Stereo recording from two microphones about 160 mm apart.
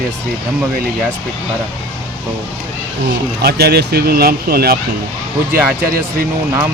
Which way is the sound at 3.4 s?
80° right.